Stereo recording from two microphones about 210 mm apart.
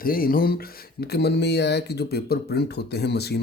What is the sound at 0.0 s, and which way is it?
Speech, 45° left (ahead or behind).